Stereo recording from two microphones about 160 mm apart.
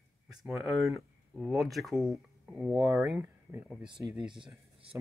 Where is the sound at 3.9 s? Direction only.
30° right (ahead or behind).